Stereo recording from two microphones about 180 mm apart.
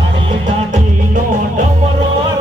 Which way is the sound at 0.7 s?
45° right (ahead or behind).